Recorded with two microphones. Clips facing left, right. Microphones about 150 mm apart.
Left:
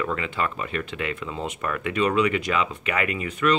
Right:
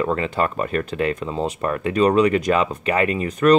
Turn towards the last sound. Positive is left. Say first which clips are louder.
# right 8 dB
turn(degrees=-40)  # may be behind; listen again after turning